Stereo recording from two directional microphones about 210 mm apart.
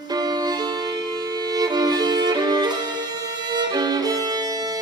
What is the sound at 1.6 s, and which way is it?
Violin, 20° right (ahead or behind).